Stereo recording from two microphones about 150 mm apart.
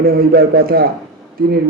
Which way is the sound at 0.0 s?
90° right.